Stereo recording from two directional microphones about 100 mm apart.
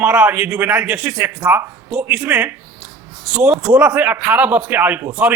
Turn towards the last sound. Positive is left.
turn(degrees=-20)  # may be behind; listen again after turning